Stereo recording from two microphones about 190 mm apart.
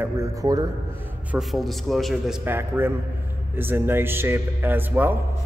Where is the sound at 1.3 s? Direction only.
Centre (ahead or behind).